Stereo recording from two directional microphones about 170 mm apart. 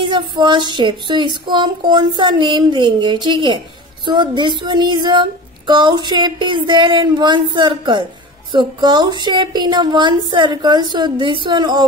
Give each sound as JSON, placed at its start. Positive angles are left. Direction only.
{"t": 0.0, "sound": "child singing", "side_deg": -25}